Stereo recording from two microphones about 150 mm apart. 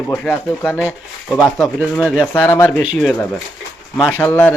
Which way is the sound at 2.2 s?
15° left (ahead or behind).